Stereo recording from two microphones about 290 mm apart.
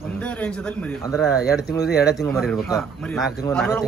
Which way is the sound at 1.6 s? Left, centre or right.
Left.